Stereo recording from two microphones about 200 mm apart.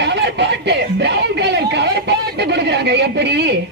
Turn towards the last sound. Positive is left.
turn(degrees=-55)  # may be behind; listen again after turning